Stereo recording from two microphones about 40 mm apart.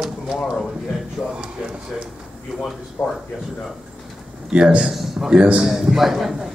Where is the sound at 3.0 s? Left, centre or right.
Left.